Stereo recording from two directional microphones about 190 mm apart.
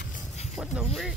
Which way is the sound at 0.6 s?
5° right (ahead or behind).